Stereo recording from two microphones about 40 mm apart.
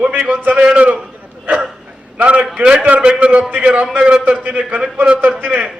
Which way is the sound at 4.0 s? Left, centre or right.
Right.